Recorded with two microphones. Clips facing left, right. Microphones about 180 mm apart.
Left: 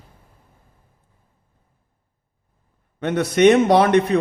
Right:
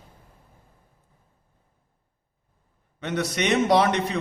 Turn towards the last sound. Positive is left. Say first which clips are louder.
# left 6 dB
turn(degrees=55)  # may be behind; listen again after turning